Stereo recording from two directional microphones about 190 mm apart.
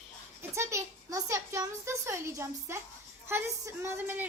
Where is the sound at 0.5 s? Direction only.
15° right (ahead or behind).